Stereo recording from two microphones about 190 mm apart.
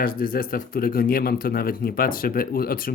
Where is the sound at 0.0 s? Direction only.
50° left (ahead or behind).